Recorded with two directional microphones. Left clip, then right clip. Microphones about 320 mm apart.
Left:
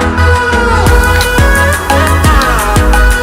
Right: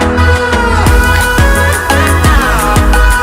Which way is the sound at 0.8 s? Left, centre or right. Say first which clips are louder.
Left 1 dB; centre.